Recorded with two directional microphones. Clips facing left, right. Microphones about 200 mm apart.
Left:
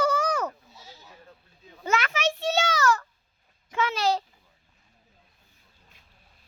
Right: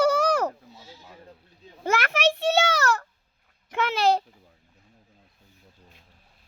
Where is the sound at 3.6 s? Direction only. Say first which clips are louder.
Right 3 dB; 60° right (ahead or behind).